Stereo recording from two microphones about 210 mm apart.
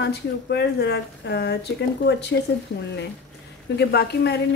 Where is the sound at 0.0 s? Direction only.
50° left (ahead or behind).